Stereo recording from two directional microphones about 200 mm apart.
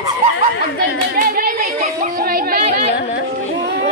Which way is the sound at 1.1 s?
50° right (ahead or behind).